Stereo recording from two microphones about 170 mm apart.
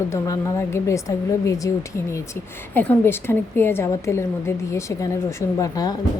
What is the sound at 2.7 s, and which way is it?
A woman's voice, 10° left (ahead or behind).